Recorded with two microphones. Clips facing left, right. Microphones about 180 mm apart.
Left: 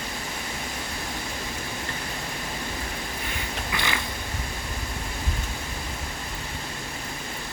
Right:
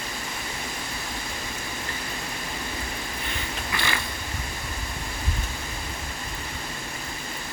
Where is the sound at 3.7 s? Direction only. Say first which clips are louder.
Even; 15° left (ahead or behind).